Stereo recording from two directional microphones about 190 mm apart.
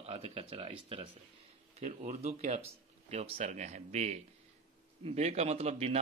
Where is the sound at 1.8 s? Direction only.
45° right (ahead or behind).